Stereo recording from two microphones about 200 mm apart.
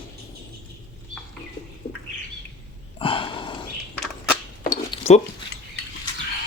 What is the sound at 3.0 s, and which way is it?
Sniff, 25° left (ahead or behind).